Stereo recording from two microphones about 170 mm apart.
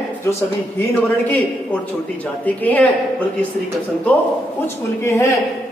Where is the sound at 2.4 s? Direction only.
10° left (ahead or behind).